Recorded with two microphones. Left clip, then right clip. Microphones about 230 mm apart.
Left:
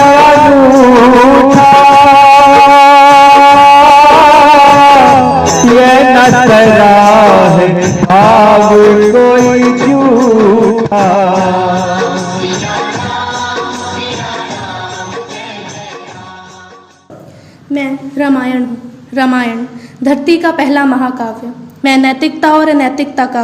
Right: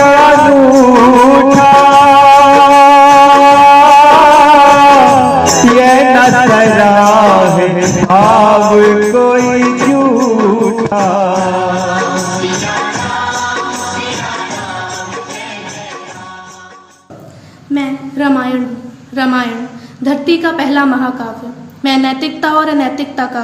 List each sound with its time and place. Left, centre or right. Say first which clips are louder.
0.0 s music: left 1 dB; left
8.2 s mantra: left 3 dB; left
8.8 s music: left 3 dB; left
18.2 s a sound: left 1 dB; left
21.8 s a woman's voice: left 3 dB; left